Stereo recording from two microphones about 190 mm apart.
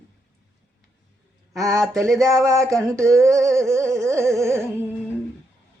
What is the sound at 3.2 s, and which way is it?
Carnatic music, 15° right (ahead or behind).